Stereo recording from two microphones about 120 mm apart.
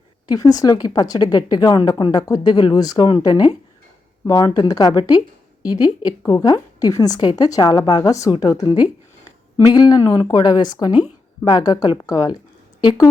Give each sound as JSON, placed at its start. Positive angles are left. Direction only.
{"t": 0.3, "sound": "a woman's voice", "side_deg": 30}